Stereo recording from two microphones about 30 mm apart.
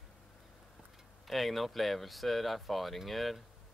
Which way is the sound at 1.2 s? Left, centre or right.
Centre.